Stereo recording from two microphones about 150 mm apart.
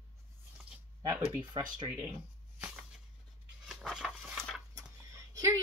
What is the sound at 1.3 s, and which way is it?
Speech, 25° right (ahead or behind).